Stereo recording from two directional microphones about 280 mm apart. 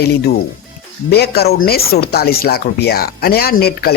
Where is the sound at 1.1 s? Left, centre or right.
Left.